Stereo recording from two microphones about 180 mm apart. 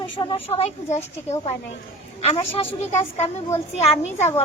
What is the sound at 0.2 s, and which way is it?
Speech, 30° left (ahead or behind).